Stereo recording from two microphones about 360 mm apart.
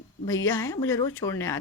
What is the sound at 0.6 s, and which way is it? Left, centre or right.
Speech, centre.